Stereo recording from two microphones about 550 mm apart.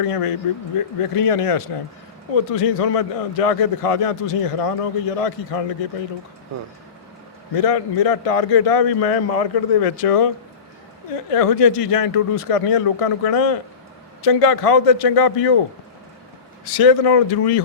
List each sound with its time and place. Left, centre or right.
0.0 s a man's voice: left
7.5 s a man's voice: left
16.6 s speech: left